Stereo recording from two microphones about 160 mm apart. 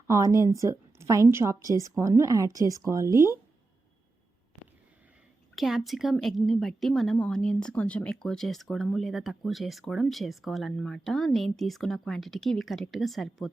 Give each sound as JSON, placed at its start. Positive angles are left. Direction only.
{"t": 0.1, "sound": "a woman's voice", "side_deg": -20}
{"t": 5.5, "sound": "a woman's voice", "side_deg": 0}